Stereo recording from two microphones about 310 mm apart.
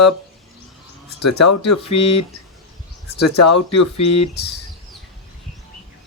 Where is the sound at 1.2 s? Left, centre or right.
Left.